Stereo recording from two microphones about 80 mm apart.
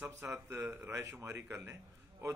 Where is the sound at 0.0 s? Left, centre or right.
Right.